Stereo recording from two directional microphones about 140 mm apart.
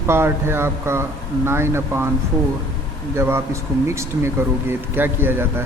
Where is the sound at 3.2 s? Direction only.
20° right (ahead or behind).